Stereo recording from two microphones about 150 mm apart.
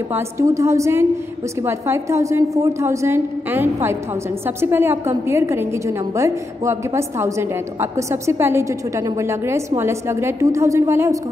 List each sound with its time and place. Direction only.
0.1 s a woman's voice: 20° right (ahead or behind)